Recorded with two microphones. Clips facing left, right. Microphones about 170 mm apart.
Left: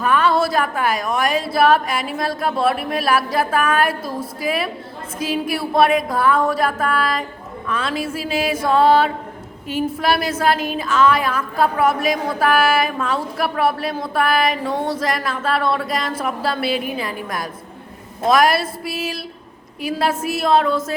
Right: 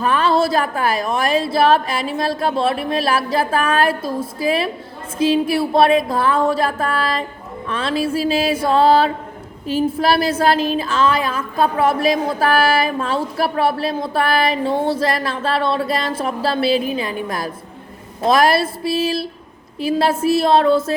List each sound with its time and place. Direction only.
0.0 s a woman's voice: 30° right (ahead or behind)
7.7 s music: 30° right (ahead or behind)
9.6 s a woman's voice: 30° right (ahead or behind)
19.8 s music: 30° right (ahead or behind)